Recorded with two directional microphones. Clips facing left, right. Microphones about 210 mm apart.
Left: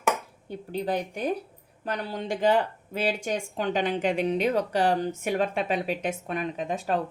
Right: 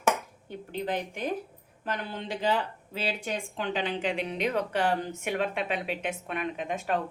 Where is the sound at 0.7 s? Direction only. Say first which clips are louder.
Left 3 dB; 40° left (ahead or behind).